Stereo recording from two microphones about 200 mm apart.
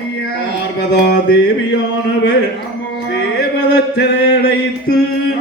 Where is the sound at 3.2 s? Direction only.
60° left (ahead or behind).